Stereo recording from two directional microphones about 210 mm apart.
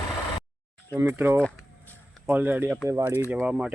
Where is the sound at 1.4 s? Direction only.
5° left (ahead or behind).